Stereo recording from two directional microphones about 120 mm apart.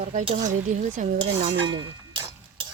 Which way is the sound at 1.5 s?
40° right (ahead or behind).